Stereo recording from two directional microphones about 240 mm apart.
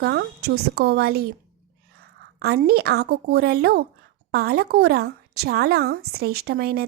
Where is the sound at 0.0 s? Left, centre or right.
Right.